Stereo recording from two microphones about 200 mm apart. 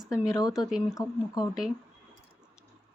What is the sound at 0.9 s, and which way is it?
Speech, 15° left (ahead or behind).